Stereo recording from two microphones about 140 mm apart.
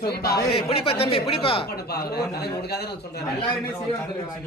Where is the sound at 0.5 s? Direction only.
40° left (ahead or behind).